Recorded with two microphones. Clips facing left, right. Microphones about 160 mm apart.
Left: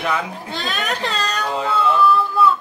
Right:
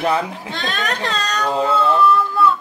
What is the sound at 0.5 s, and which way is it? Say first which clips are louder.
Speech: right 1 dB; 5° left (ahead or behind).